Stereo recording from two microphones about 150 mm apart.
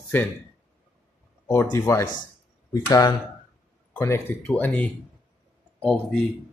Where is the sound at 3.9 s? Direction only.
20° left (ahead or behind).